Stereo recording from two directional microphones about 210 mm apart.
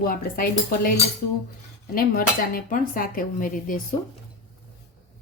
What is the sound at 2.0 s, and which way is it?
Speech, 45° left (ahead or behind).